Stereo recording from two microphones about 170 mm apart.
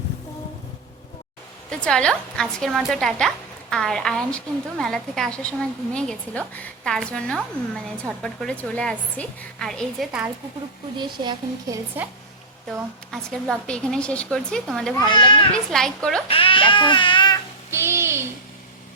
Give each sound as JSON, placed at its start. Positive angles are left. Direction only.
{"t": 1.7, "sound": "a woman's voice", "side_deg": 5}
{"t": 10.9, "sound": "speech", "side_deg": -25}
{"t": 13.1, "sound": "a woman's voice", "side_deg": 5}
{"t": 15.1, "sound": "a child's voice", "side_deg": 30}
{"t": 15.7, "sound": "a woman's voice", "side_deg": 5}
{"t": 16.3, "sound": "baby cry", "side_deg": 30}
{"t": 17.7, "sound": "a sound", "side_deg": -15}